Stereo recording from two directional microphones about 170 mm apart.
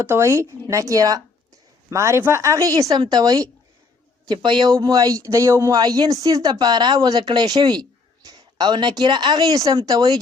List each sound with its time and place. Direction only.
0.0 s speech: 15° right (ahead or behind)